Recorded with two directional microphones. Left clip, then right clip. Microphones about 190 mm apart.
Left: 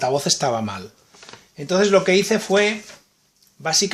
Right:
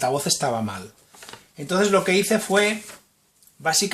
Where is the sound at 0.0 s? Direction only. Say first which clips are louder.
Left 3 dB; 25° left (ahead or behind).